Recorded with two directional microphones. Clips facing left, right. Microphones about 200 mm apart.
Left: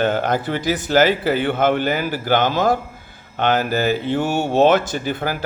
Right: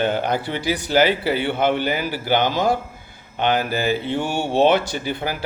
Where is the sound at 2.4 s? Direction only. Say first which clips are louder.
Left 2 dB; 15° right (ahead or behind).